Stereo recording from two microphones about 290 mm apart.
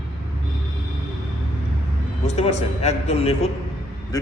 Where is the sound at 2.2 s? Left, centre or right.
Left.